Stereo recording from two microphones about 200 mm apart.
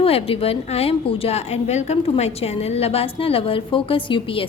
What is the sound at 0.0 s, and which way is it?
A woman's voice, 30° left (ahead or behind).